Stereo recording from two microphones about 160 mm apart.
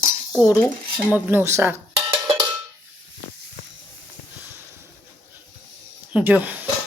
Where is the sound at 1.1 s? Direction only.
10° right (ahead or behind).